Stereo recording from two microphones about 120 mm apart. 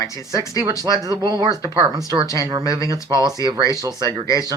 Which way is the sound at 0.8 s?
30° right (ahead or behind).